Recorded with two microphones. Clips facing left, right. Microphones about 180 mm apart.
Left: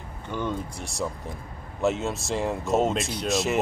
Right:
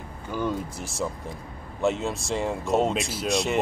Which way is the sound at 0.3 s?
5° right (ahead or behind).